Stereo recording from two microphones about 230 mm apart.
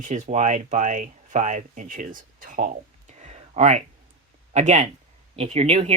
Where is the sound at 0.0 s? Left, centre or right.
Right.